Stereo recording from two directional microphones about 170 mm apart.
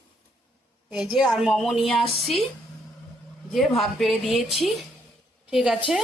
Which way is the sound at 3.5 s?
Centre (ahead or behind).